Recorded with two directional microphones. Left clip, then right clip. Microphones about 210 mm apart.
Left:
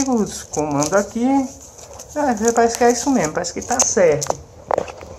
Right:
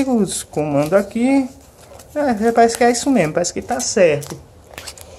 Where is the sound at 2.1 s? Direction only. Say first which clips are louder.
Right 1 dB; 90° right.